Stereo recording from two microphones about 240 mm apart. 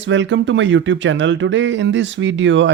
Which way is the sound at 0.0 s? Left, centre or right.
Right.